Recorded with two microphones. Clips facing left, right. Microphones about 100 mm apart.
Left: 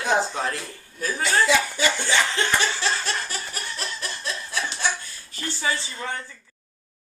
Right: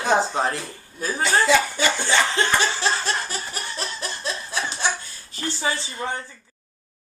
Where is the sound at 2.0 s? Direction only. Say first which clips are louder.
Right 2 dB; 30° right (ahead or behind).